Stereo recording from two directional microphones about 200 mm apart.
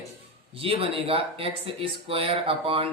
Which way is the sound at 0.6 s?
30° right (ahead or behind).